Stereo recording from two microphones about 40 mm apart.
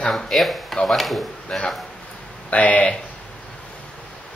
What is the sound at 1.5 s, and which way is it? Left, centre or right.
Speech, left.